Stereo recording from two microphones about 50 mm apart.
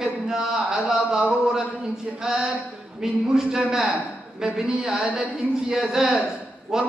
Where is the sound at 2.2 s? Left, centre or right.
Centre.